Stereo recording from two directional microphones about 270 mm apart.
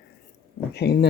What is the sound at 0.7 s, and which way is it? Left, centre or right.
Speech, left.